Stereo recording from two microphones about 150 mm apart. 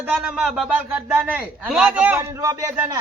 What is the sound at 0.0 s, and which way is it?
A man's voice, 5° right (ahead or behind).